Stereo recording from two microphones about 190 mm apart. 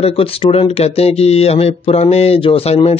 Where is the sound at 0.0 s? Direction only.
30° left (ahead or behind).